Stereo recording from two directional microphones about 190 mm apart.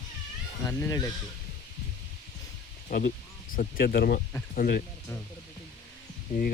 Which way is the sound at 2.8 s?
45° left (ahead or behind).